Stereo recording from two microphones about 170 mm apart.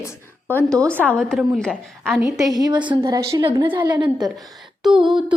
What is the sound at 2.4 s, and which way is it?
A woman's voice, 20° right (ahead or behind).